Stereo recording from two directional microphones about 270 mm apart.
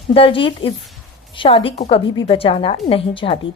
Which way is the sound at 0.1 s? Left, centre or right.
Centre.